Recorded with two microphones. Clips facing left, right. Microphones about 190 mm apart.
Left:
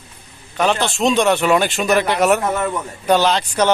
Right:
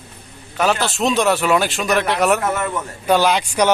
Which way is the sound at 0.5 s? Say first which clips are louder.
Left 1 dB; 5° right (ahead or behind).